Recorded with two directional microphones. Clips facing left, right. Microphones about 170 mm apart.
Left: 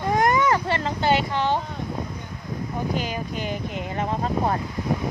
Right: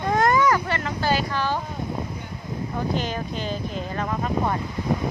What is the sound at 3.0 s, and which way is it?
Speech, 10° left (ahead or behind).